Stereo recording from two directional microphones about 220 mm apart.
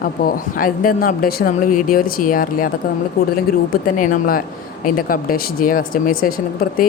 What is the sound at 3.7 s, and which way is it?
A woman's voice, 35° left (ahead or behind).